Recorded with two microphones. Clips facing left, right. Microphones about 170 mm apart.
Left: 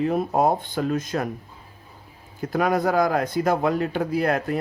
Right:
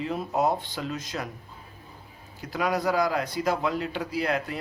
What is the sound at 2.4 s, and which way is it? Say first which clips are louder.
Speech: left 5 dB; 50° left (ahead or behind).